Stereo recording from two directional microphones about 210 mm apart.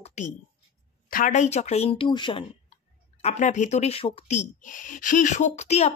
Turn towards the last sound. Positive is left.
turn(degrees=30)  # may be behind; listen again after turning